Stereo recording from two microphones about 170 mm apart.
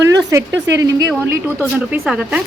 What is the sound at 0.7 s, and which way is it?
A woman's voice, 20° right (ahead or behind).